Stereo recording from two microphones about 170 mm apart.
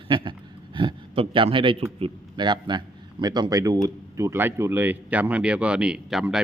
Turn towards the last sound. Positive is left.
turn(degrees=-5)  # may be behind; listen again after turning